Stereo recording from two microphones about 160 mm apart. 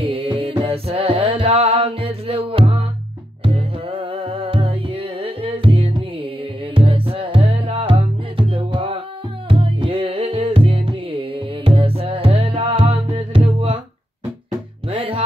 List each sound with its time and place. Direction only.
0.0 s music: 35° right (ahead or behind)
14.9 s music: 35° right (ahead or behind)